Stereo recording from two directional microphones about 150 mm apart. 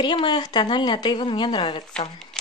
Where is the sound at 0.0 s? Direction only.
30° left (ahead or behind).